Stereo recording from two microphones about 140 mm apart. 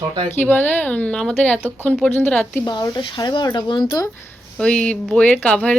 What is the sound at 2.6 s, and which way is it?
Speech, 30° left (ahead or behind).